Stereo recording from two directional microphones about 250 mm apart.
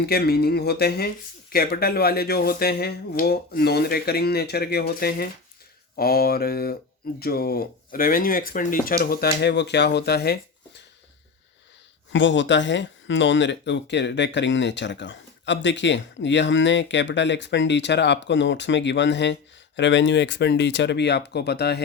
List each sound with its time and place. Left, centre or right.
0.0 s speech: left
12.1 s speech: left